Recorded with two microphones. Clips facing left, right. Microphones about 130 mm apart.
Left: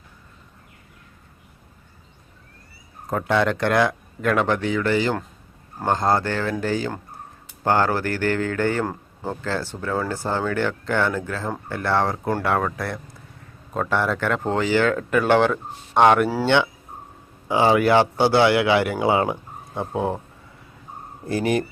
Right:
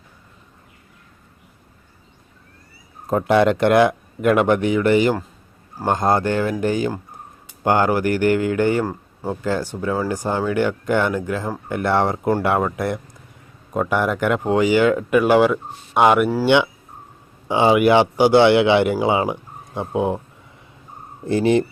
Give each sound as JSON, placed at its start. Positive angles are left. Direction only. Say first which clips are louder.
{"t": 3.1, "sound": "speech", "louder": "right 5 dB", "side_deg": -20}
{"t": 8.8, "sound": "speech", "louder": "right 2 dB", "side_deg": -5}
{"t": 9.4, "sound": "speech", "louder": "right 6 dB", "side_deg": -15}
{"t": 17.5, "sound": "speech", "louder": "right 2 dB", "side_deg": -20}
{"t": 21.2, "sound": "speech", "louder": "right 5 dB", "side_deg": -25}